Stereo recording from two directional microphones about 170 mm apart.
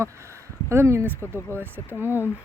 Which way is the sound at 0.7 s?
15° right (ahead or behind).